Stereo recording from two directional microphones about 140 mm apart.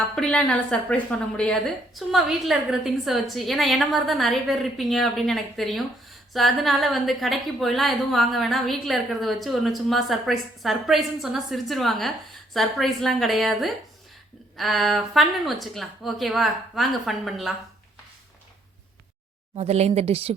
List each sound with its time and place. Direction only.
0.2 s a woman's voice: 5° left (ahead or behind)
19.5 s speech: 50° right (ahead or behind)